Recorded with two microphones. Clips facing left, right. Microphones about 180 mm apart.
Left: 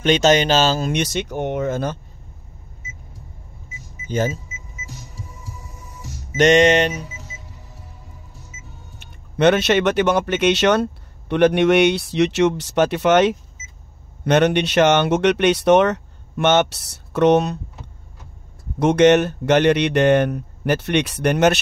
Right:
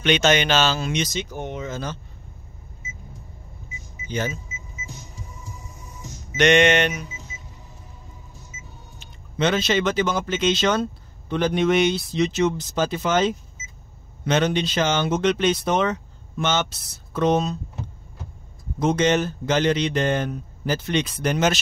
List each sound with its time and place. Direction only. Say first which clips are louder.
0.0 s speech: left 4 dB; 40° left (ahead or behind)
0.9 s speech: left 4 dB; 65° left (ahead or behind)
4.1 s speech: left 5 dB; 45° left (ahead or behind)
6.3 s speech: left 4 dB; 40° left (ahead or behind)
9.4 s speech: left 6 dB; 65° left (ahead or behind)
18.8 s speech: left 7 dB; 70° left (ahead or behind)